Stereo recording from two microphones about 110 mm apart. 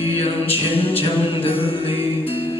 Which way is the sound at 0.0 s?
60° left (ahead or behind).